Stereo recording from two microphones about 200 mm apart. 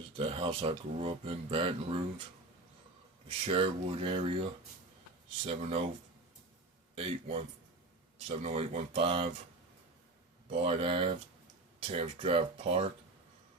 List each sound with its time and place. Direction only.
0.2 s speech: 25° right (ahead or behind)
3.2 s speech: 30° right (ahead or behind)
5.5 s speech: 30° right (ahead or behind)
6.9 s speech: 30° right (ahead or behind)
10.5 s speech: 30° right (ahead or behind)